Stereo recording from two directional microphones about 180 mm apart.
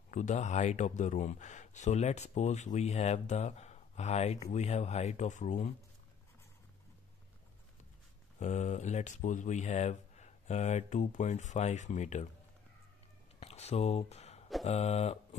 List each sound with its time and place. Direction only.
0.1 s speech: 40° left (ahead or behind)
8.4 s speech: 40° left (ahead or behind)
13.4 s speech: 35° left (ahead or behind)